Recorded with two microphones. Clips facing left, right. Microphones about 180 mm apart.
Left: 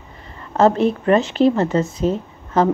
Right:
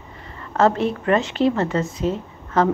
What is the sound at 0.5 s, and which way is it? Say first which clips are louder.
Speech: left 3 dB; 15° left (ahead or behind).